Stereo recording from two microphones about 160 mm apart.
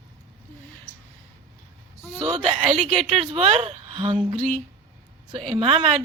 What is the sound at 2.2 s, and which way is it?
Speech, 30° right (ahead or behind).